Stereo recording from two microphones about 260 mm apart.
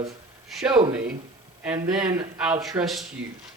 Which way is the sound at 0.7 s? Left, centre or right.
Centre.